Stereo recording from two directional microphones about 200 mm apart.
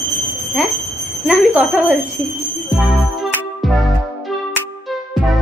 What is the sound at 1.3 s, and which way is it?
Speech, 5° right (ahead or behind).